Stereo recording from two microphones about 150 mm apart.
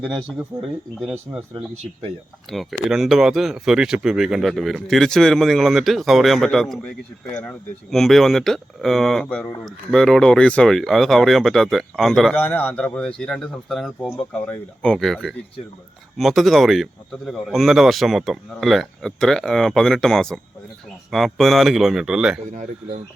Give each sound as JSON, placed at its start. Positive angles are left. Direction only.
{"t": 0.5, "sound": "speech", "side_deg": -20}
{"t": 0.9, "sound": "speech", "side_deg": 0}
{"t": 2.5, "sound": "speech", "side_deg": 0}